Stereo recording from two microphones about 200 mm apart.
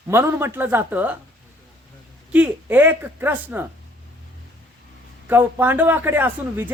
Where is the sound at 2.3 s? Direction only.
10° right (ahead or behind).